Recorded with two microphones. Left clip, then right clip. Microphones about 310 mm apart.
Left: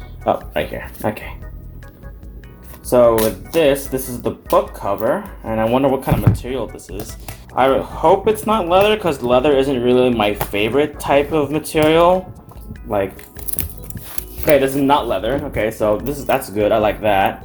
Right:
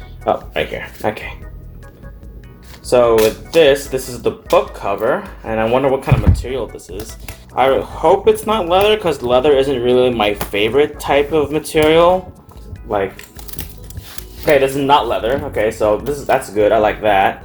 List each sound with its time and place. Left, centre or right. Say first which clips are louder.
0.3 s speech: right 1 dB; left
2.9 s speech: right 1 dB; left
14.4 s speech: right 1 dB; centre